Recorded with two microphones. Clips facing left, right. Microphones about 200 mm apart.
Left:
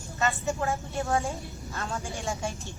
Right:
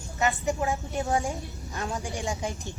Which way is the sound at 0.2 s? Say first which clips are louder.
Right 2 dB; 15° right (ahead or behind).